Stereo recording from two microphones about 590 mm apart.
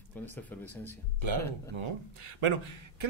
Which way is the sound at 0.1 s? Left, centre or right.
Centre.